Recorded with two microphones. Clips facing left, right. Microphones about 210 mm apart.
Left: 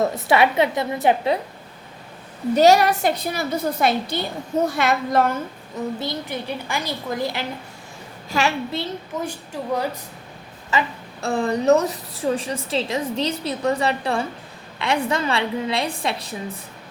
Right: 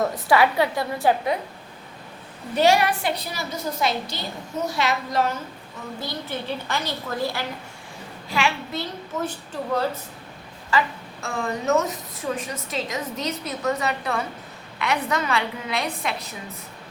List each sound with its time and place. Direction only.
0.0 s a woman's voice: 25° left (ahead or behind)
2.6 s a woman's voice: 40° left (ahead or behind)
6.0 s a woman's voice: 15° left (ahead or behind)
8.3 s a woman's voice: 40° left (ahead or behind)
8.7 s a woman's voice: 30° left (ahead or behind)
9.2 s a woman's voice: 10° left (ahead or behind)
11.2 s a woman's voice: 35° left (ahead or behind)